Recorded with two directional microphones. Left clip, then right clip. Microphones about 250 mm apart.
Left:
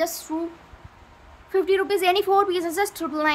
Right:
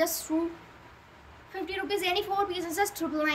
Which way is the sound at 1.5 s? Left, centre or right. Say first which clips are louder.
Left 11 dB; centre.